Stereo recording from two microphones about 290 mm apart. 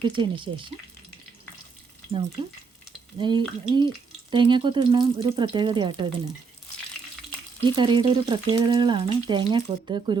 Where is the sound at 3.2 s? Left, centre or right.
Centre.